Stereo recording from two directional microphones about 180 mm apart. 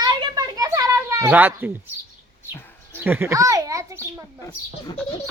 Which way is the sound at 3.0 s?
10° right (ahead or behind).